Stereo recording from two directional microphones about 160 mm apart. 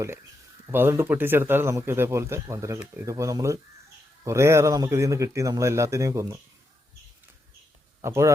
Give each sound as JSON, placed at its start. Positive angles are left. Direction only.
{"t": 0.7, "sound": "a man's voice", "side_deg": -15}
{"t": 8.0, "sound": "a man's voice", "side_deg": -15}